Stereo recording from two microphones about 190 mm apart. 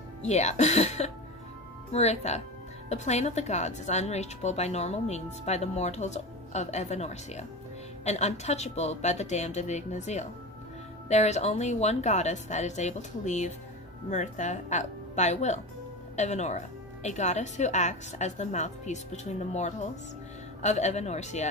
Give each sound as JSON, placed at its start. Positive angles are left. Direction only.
{"t": 0.2, "sound": "a woman's voice", "side_deg": 35}